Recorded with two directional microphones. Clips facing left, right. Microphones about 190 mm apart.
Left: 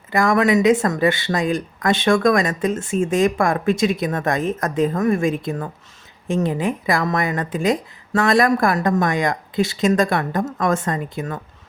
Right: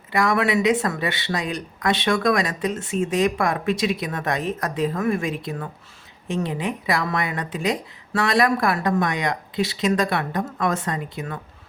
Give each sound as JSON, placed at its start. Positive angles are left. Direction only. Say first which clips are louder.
{"t": 0.1, "sound": "speech", "louder": "left 4 dB", "side_deg": 45}